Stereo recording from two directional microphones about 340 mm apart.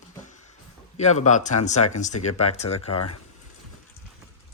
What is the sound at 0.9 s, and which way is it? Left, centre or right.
Speech, centre.